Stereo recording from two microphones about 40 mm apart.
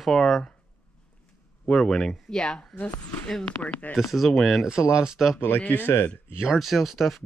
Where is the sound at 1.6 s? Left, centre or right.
Centre.